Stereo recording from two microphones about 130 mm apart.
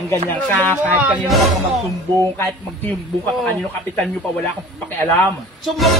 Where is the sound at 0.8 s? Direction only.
10° right (ahead or behind).